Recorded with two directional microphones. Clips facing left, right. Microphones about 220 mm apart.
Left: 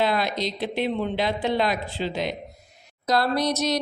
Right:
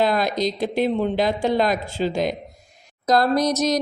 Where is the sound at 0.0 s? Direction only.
45° right (ahead or behind).